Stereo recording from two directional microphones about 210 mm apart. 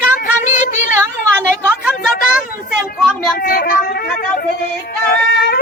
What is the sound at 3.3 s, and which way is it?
Speech, 45° left (ahead or behind).